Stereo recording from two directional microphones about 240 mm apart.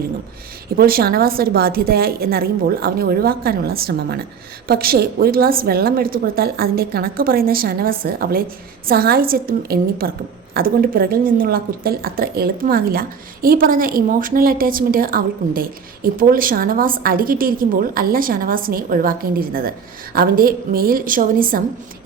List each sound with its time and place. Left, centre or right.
0.8 s a woman's voice: right